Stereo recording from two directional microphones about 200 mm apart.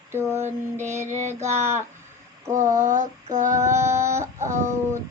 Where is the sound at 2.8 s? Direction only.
40° right (ahead or behind).